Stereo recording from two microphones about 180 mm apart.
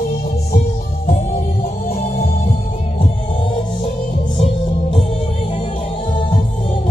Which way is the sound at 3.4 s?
30° left (ahead or behind).